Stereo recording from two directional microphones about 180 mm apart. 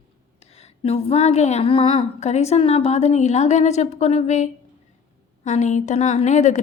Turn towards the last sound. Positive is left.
turn(degrees=40)  # may be behind; listen again after turning